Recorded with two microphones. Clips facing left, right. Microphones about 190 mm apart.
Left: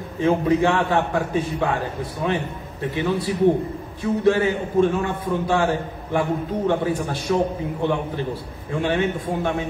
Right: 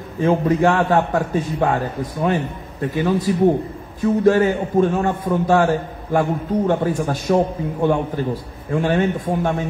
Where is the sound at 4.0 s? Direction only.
45° right (ahead or behind).